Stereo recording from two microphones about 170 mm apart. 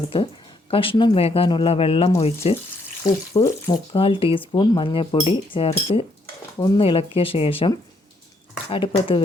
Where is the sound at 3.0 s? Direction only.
20° left (ahead or behind).